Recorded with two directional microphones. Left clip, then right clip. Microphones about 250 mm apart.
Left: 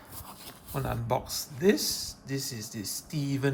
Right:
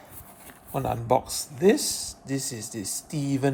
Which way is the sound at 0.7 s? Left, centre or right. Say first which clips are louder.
Right 7 dB; right.